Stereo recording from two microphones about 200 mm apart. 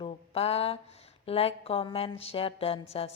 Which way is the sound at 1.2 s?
30° left (ahead or behind).